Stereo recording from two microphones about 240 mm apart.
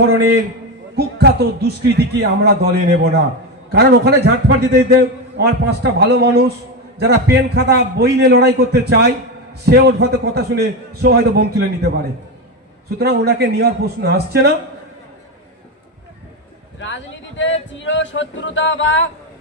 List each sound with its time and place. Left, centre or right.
0.9 s a man's voice: right
13.0 s a man's voice: right
16.8 s speech: left
17.7 s singing: left